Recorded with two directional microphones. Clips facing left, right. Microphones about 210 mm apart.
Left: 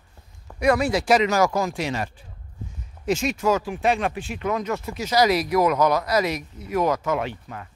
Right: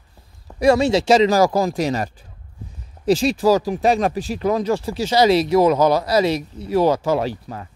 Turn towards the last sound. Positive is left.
turn(degrees=-35)  # may be behind; listen again after turning